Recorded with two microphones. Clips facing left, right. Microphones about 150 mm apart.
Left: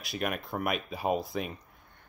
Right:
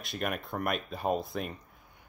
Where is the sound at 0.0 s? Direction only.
Centre (ahead or behind).